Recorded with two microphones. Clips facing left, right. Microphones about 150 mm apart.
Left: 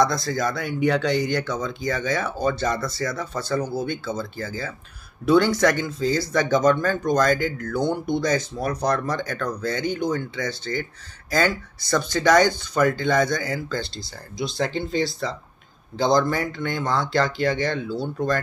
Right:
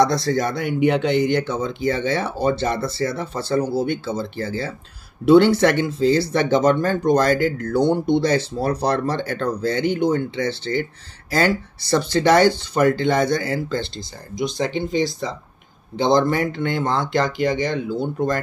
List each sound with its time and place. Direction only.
0.0 s speech: 30° right (ahead or behind)